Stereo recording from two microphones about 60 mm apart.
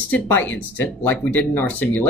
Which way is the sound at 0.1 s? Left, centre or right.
Left.